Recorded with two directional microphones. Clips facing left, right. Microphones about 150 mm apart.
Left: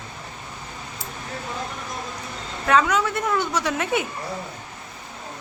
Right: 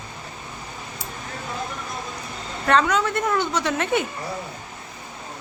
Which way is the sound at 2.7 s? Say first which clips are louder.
Even; 5° left (ahead or behind).